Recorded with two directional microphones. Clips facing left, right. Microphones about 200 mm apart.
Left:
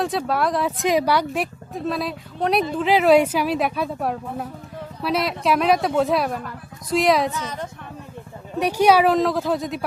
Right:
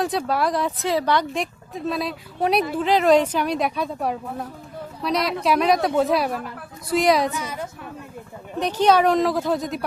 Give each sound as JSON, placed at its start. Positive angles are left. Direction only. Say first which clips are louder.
{"t": 0.0, "sound": "speech", "louder": "even", "side_deg": 0}
{"t": 0.8, "sound": "a woman's voice", "louder": "left 4 dB", "side_deg": 15}
{"t": 8.5, "sound": "speech", "louder": "left 1 dB", "side_deg": 10}